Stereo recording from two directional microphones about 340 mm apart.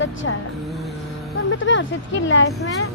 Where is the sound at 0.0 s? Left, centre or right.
Left.